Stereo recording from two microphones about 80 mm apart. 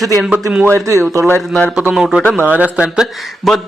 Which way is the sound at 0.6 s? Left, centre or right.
Right.